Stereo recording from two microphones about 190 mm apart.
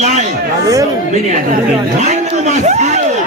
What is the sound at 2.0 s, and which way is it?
Speech, 35° right (ahead or behind).